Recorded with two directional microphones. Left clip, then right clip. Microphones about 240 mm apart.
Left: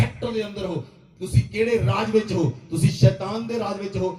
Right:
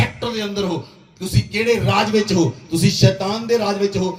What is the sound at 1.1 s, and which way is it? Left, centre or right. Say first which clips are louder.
A man's voice: right 2 dB; right.